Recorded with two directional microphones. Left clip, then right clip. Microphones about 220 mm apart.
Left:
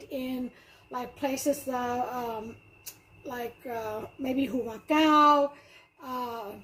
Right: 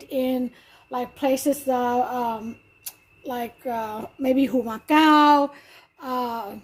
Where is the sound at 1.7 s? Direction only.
55° right (ahead or behind).